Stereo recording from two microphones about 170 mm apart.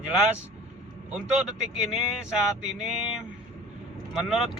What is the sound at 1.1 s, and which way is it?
A man's voice, 5° right (ahead or behind).